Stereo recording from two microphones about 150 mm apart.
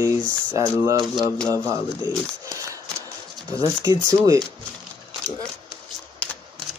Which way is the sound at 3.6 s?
20° right (ahead or behind).